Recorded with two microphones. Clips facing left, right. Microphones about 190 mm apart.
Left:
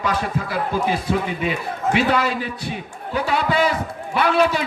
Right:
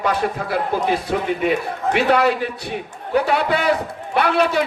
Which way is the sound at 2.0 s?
60° right (ahead or behind).